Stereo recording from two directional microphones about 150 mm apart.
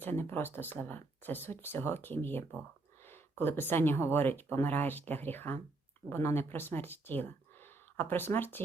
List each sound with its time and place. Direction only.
0.0 s speech: 15° left (ahead or behind)